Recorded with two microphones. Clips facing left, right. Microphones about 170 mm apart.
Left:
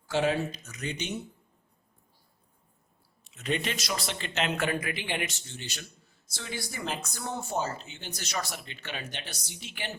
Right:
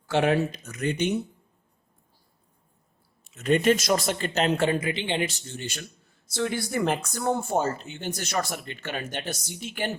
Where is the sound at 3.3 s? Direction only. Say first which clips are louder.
Right 11 dB; 45° right (ahead or behind).